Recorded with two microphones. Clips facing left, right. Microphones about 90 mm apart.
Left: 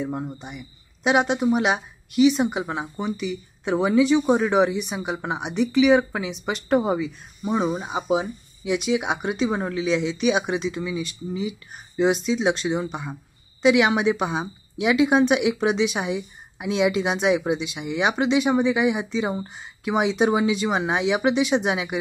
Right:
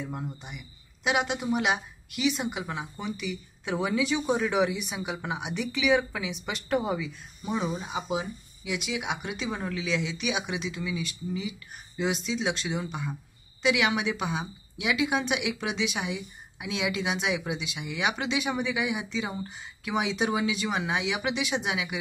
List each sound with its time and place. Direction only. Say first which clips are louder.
0.0 s speech: left 7 dB; 30° left (ahead or behind)